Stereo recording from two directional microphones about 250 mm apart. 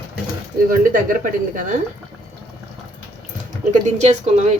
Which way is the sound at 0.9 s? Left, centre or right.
Right.